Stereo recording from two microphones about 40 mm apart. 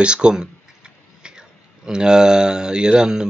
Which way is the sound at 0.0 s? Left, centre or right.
Right.